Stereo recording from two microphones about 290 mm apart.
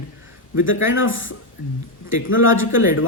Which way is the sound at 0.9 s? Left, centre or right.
Left.